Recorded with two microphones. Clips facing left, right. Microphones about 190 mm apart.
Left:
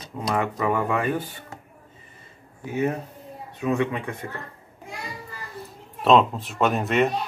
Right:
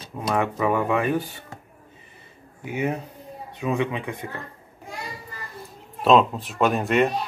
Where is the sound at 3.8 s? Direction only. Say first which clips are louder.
Even; 15° right (ahead or behind).